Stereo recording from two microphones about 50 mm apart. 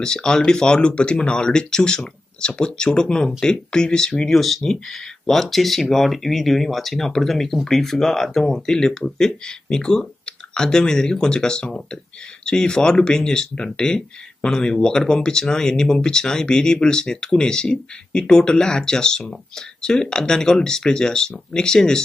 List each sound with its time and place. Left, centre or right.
0.0 s speech: centre